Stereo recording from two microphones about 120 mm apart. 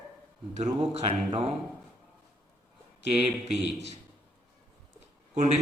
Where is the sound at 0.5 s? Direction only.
65° right (ahead or behind).